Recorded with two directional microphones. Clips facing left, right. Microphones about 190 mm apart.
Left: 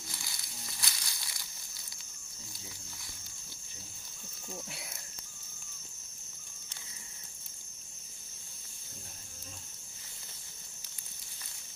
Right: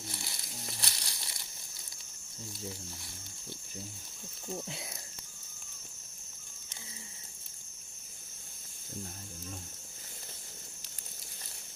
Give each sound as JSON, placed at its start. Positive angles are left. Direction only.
{"t": 0.1, "sound": "crumpling", "side_deg": -35}